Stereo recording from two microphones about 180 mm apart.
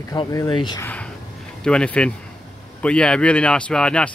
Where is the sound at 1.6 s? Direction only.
5° left (ahead or behind).